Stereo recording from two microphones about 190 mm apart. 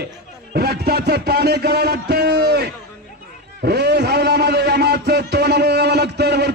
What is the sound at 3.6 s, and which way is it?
Music, 60° right (ahead or behind).